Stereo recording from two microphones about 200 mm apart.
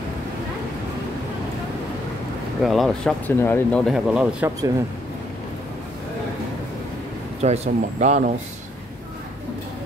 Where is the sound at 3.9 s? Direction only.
5° right (ahead or behind).